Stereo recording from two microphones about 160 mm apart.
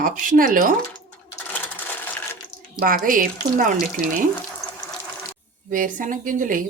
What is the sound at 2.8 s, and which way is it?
Speech, 60° right (ahead or behind).